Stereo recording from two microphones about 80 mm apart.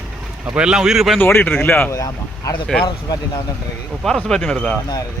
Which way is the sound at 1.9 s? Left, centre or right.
Left.